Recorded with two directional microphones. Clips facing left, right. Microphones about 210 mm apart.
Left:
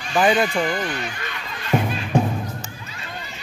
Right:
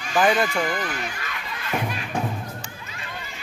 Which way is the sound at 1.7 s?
25° left (ahead or behind).